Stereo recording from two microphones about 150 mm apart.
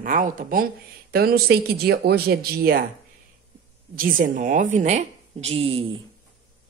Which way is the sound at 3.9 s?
65° right (ahead or behind).